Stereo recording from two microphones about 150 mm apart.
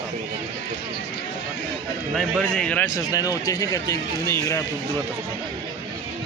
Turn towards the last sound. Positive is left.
turn(degrees=20)  # may be behind; listen again after turning